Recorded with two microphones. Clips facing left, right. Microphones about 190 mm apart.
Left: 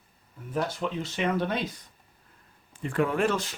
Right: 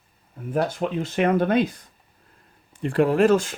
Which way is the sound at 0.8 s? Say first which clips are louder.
Right 7 dB; 55° right (ahead or behind).